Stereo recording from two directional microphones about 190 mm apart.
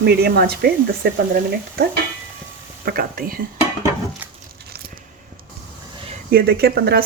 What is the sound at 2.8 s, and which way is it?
Speech, 50° right (ahead or behind).